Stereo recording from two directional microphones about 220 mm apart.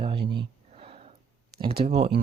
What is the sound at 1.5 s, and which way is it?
Speech, 25° right (ahead or behind).